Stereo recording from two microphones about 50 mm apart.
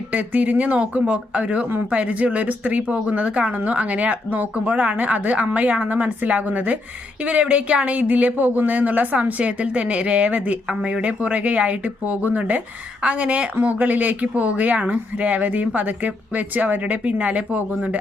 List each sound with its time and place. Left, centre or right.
0.1 s speech: right